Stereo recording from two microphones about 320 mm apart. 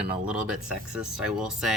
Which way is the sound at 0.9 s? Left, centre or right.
Centre.